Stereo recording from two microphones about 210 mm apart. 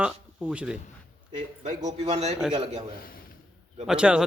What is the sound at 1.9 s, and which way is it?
Speech, 30° right (ahead or behind).